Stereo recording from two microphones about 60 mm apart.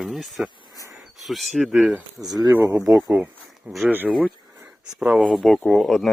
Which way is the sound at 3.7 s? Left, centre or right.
Right.